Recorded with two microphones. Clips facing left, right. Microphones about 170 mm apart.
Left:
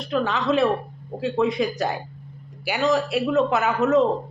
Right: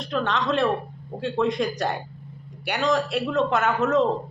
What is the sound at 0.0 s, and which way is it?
Speech, 5° left (ahead or behind).